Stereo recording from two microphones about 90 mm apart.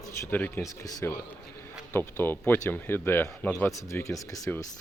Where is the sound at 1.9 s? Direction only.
25° left (ahead or behind).